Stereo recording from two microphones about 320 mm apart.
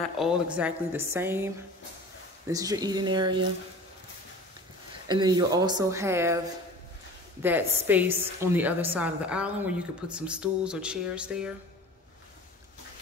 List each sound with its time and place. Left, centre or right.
0.2 s a woman's voice: centre
5.0 s speech: centre
7.4 s a woman's voice: centre